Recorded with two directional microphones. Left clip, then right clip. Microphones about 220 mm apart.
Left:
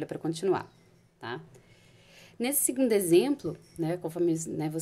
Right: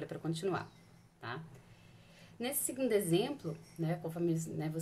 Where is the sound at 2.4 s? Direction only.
40° left (ahead or behind).